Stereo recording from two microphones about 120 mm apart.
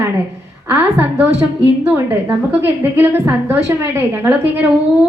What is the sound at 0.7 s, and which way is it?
A woman's voice, 15° right (ahead or behind).